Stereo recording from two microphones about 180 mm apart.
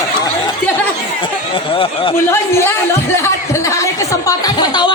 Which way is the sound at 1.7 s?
30° left (ahead or behind).